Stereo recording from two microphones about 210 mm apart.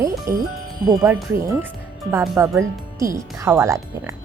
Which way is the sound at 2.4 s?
15° right (ahead or behind).